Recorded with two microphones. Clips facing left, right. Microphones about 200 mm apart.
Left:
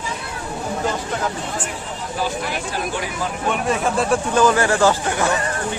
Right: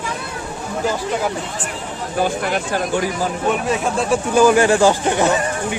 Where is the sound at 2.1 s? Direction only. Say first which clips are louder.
Right 5 dB; 55° right (ahead or behind).